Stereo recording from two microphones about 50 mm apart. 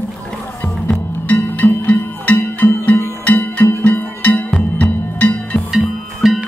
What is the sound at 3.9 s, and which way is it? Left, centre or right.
Music, left.